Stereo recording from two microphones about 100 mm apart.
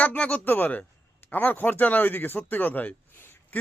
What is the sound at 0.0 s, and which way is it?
Speech, 15° left (ahead or behind).